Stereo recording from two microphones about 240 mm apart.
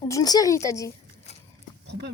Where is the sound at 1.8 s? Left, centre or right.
Right.